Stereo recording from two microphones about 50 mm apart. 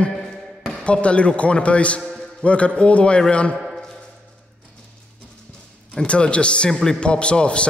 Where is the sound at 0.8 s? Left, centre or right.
Left.